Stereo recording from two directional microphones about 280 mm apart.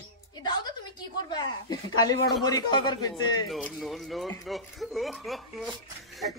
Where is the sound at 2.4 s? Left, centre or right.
Centre.